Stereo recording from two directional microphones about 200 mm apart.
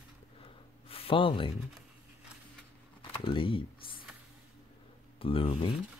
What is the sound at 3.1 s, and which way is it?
Speech, 25° left (ahead or behind).